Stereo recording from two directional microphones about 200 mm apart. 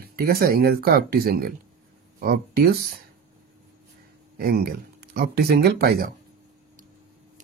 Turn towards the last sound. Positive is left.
turn(degrees=-50)  # may be behind; listen again after turning